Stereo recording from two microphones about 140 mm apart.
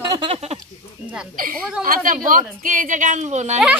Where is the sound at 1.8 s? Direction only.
80° right; by 3.5 s 55° right (ahead or behind).